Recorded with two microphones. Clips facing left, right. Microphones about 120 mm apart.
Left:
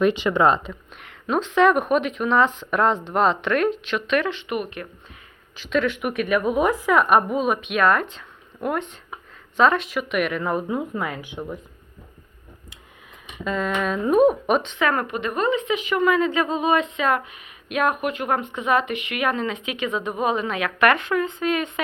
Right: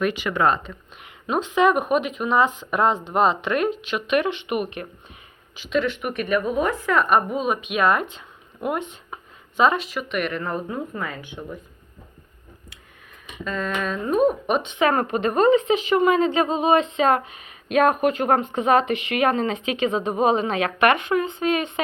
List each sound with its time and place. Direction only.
0.0 s speech: 25° left (ahead or behind)
0.7 s speech: 10° right (ahead or behind)
5.5 s a woman's voice: centre (ahead or behind)
13.4 s speech: 15° left (ahead or behind)
14.6 s speech: 15° right (ahead or behind)
14.8 s a woman's voice: 30° right (ahead or behind)